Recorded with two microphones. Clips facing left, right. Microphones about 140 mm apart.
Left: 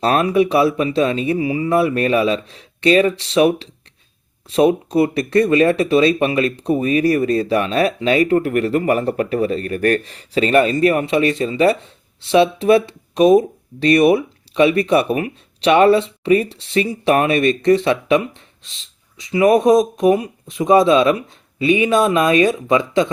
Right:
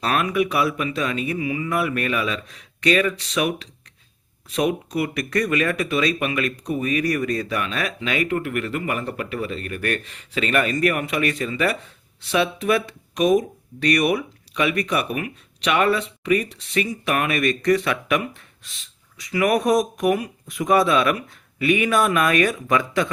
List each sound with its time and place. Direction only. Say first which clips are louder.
0.0 s speech: left 6 dB; 30° left (ahead or behind)